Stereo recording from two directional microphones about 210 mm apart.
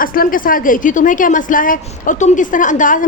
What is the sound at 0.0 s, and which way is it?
A woman's voice, 40° left (ahead or behind).